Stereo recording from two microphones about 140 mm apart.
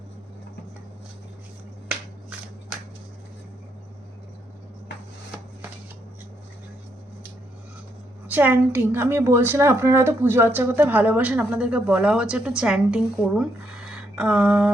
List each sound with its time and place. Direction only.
8.3 s a woman's voice: 15° right (ahead or behind)